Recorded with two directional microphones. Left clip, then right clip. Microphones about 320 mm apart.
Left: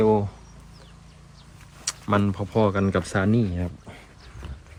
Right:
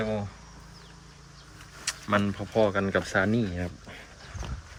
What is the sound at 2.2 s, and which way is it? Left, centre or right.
Speech, left.